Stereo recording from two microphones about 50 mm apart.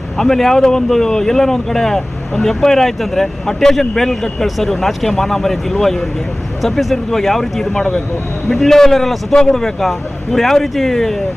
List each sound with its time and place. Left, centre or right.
0.2 s a man's voice: centre